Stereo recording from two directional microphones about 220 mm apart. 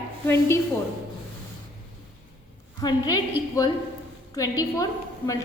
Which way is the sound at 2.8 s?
15° left (ahead or behind).